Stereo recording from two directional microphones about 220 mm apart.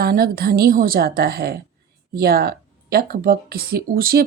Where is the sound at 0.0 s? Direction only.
45° right (ahead or behind).